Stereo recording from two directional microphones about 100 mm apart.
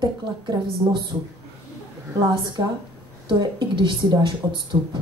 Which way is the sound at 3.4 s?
50° right (ahead or behind).